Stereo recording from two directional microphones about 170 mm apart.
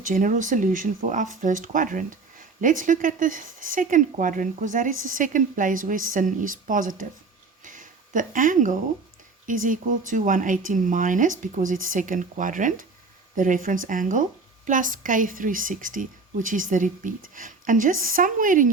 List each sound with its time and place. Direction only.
0.0 s speech: 50° right (ahead or behind)
7.6 s a sound: 50° right (ahead or behind)
9.5 s speech: 50° right (ahead or behind)